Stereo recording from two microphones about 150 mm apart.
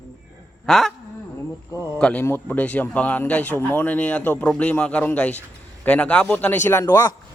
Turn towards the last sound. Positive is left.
turn(degrees=15)  # may be behind; listen again after turning